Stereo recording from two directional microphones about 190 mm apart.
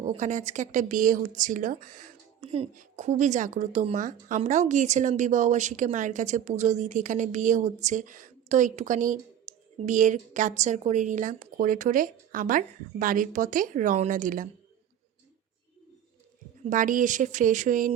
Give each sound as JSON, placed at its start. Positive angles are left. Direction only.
{"t": 0.0, "sound": "speech", "side_deg": -40}
{"t": 9.5, "sound": "a sound", "side_deg": -40}
{"t": 9.8, "sound": "a woman's voice", "side_deg": -40}
{"t": 16.6, "sound": "a woman's voice", "side_deg": -45}